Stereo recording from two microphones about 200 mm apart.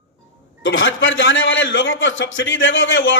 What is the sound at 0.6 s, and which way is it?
A man's voice, 75° left (ahead or behind).